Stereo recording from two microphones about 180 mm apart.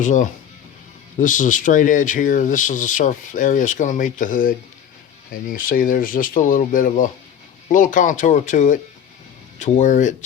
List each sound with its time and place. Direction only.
0.0 s speech: 45° left (ahead or behind)